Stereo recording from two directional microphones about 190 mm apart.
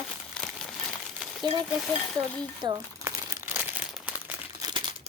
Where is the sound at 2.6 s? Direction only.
20° right (ahead or behind).